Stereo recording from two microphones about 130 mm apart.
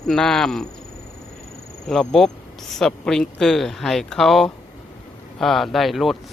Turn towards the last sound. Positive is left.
turn(degrees=0)  # may be behind; listen again after turning